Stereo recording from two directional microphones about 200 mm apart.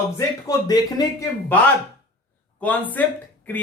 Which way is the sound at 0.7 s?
20° left (ahead or behind).